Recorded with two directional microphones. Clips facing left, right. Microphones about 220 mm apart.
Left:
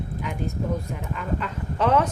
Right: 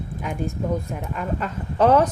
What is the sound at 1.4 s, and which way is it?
Speech, 40° right (ahead or behind).